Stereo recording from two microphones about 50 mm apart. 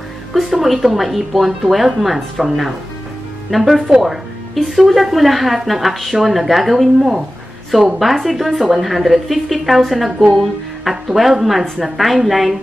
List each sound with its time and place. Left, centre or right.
0.3 s a woman's voice: centre